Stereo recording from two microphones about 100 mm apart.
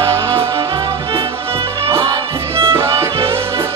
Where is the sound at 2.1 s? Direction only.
25° right (ahead or behind).